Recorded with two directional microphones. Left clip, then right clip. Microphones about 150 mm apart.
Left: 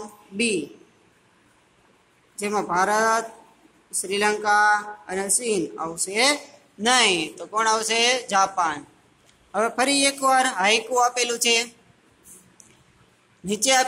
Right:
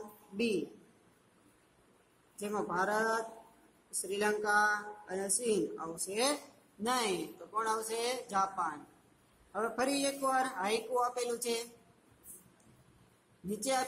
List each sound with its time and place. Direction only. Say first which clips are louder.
2.3 s a woman's voice: left 12 dB; 20° left (ahead or behind)
13.5 s a woman's voice: left 14 dB; 15° left (ahead or behind)